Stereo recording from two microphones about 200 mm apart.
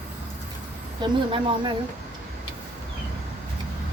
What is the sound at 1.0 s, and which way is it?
Speech, 20° right (ahead or behind).